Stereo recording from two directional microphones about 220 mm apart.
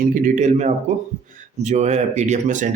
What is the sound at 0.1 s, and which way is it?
A man's voice, 30° right (ahead or behind).